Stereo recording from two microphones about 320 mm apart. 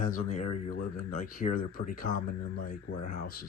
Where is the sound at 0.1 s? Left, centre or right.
Left.